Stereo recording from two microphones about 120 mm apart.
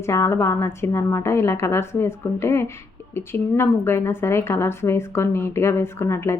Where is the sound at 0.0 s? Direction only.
25° left (ahead or behind).